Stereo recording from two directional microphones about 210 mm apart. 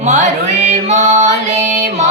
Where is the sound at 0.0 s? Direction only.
35° right (ahead or behind).